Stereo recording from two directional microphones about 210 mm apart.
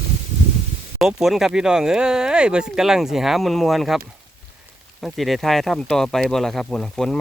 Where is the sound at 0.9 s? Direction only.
Centre (ahead or behind).